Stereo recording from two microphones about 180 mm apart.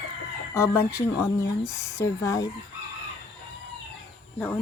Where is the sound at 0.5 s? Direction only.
15° left (ahead or behind).